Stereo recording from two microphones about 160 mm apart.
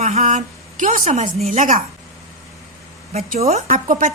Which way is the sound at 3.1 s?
40° right (ahead or behind).